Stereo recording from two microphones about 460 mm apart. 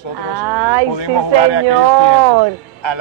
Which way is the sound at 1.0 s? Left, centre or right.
Left.